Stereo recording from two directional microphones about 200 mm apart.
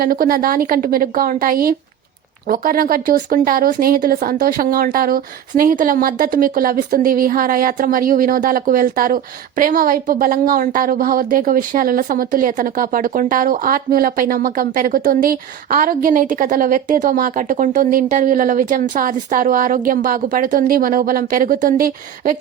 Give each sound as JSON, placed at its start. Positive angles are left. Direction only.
{"t": 0.0, "sound": "a woman's voice", "side_deg": -45}